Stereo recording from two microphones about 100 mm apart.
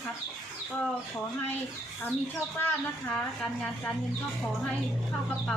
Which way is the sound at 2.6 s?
20° left (ahead or behind).